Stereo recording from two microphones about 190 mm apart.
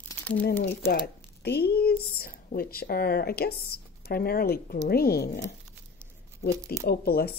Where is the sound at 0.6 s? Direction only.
55° left (ahead or behind).